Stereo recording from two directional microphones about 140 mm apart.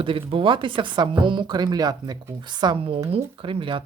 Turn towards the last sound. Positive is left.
turn(degrees=-35)  # may be behind; listen again after turning